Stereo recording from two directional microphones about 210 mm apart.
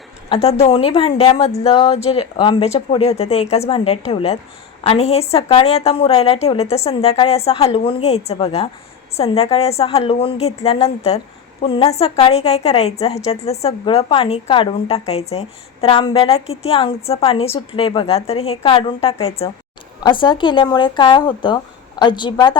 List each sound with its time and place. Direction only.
0.3 s a woman's voice: 30° left (ahead or behind)